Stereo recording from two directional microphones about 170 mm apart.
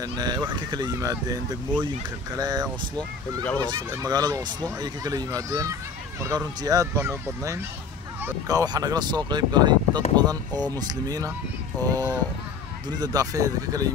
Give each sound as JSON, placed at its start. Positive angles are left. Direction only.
{"t": 0.0, "sound": "speech", "side_deg": -25}